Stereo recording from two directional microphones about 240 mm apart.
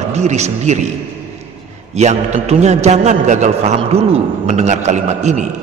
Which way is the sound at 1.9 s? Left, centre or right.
Right.